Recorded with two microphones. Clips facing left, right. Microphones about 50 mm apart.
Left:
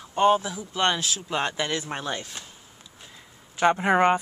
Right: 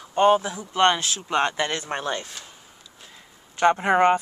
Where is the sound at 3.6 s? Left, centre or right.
Centre.